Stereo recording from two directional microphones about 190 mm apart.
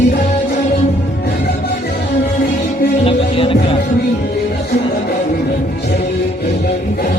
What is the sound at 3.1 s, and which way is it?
Music, 30° left (ahead or behind).